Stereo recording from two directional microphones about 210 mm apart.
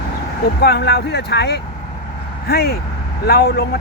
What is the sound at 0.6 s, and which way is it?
Speech, 50° left (ahead or behind).